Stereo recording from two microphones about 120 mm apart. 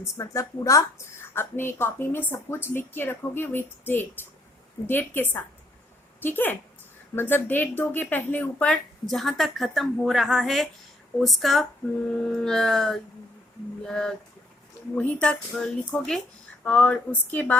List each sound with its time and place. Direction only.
0.0 s a woman's voice: 25° left (ahead or behind)